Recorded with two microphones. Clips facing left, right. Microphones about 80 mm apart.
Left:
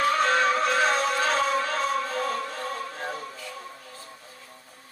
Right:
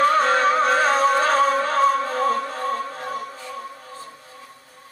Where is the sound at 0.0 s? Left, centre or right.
Right.